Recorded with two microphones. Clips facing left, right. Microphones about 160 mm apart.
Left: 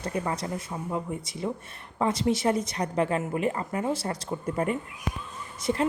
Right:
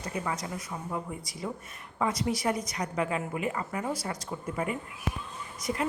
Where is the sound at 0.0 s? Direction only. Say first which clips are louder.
Left 4 dB; 30° left (ahead or behind).